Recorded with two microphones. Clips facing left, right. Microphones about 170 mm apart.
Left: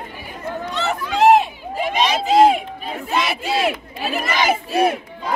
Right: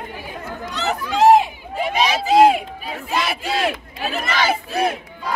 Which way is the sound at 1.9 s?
5° right (ahead or behind).